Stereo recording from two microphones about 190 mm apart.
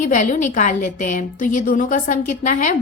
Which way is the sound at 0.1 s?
40° left (ahead or behind).